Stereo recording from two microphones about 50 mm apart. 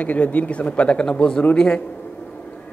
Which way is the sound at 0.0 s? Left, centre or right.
Left.